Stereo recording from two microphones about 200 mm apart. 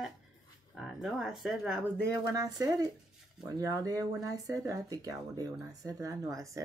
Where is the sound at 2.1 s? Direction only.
15° right (ahead or behind).